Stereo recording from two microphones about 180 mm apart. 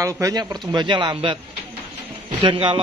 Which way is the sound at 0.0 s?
20° right (ahead or behind).